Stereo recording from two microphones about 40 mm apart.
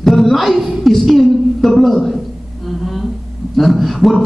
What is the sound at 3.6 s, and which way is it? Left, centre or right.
Speech, centre.